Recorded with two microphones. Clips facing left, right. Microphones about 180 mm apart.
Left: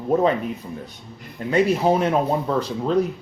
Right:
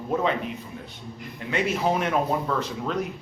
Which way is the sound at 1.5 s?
40° left (ahead or behind).